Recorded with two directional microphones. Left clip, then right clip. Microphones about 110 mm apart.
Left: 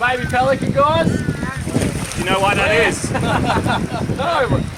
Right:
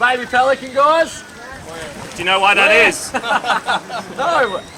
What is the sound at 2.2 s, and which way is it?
Speech, 35° right (ahead or behind).